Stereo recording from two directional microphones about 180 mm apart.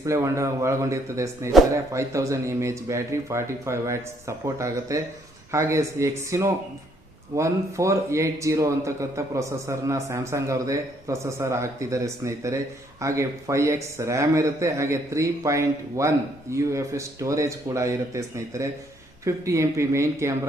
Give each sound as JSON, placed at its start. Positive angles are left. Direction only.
{"t": 0.0, "sound": "a man's voice", "side_deg": -15}